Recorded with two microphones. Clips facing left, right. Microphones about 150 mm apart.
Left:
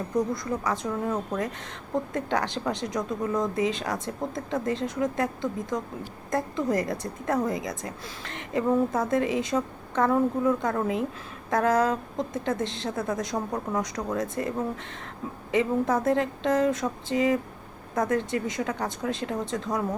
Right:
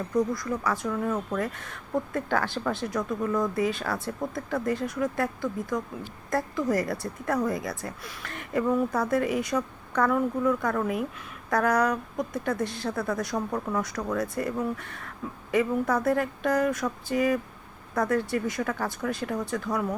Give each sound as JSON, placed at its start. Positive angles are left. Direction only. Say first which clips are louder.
{"t": 0.2, "sound": "a woman's voice", "louder": "right 1 dB", "side_deg": 20}